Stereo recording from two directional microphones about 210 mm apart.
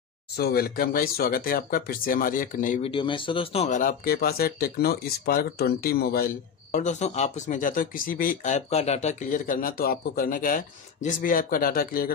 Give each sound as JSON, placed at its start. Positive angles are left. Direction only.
{"t": 0.4, "sound": "speech", "side_deg": 45}
{"t": 2.9, "sound": "speech", "side_deg": 25}